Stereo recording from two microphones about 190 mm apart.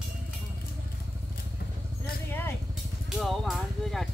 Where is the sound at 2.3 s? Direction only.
10° left (ahead or behind).